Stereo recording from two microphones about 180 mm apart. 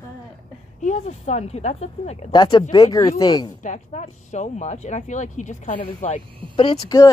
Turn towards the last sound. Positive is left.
turn(degrees=30)  # may be behind; listen again after turning